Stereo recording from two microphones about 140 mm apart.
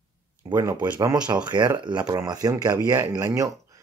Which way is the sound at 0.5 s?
15° right (ahead or behind).